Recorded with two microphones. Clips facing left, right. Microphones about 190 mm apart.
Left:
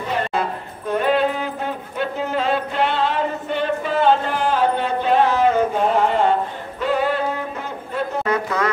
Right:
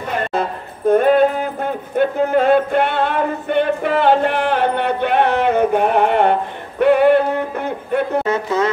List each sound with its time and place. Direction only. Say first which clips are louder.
0.3 s a sound: right 2 dB; 45° right (ahead or behind); by 6.3 s 65° right (ahead or behind)
6.8 s music: right 9 dB; 60° right (ahead or behind)
8.2 s music: right 3 dB; 25° right (ahead or behind)